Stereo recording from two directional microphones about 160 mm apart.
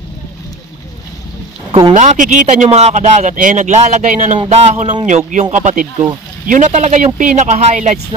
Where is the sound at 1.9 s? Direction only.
50° right (ahead or behind).